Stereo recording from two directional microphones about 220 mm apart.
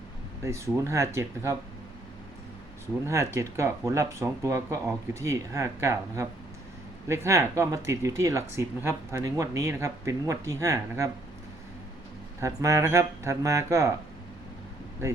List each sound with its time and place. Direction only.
0.4 s speech: 15° right (ahead or behind)
3.1 s speech: 10° right (ahead or behind)
12.4 s speech: 15° right (ahead or behind)